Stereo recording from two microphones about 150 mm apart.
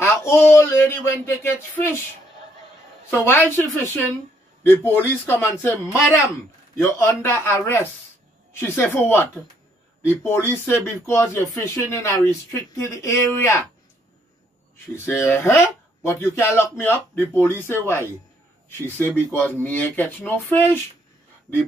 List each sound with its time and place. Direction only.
0.0 s speech: 15° left (ahead or behind)
3.1 s speech: 15° left (ahead or behind)
8.5 s speech: 15° left (ahead or behind)
15.0 s speech: 15° left (ahead or behind)